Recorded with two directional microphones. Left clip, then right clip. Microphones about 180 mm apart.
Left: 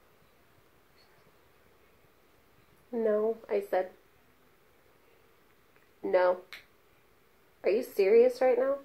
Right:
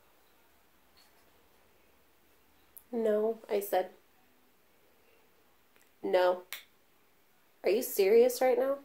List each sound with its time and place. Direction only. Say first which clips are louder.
2.9 s speech: left 1 dB; 15° right (ahead or behind)
5.9 s a sound: left 1 dB; 15° right (ahead or behind)
7.6 s a woman's voice: left 1 dB; 15° right (ahead or behind)